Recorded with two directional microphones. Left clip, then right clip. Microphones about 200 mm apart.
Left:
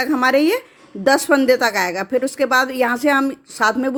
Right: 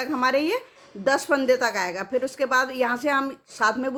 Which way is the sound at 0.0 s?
35° left (ahead or behind).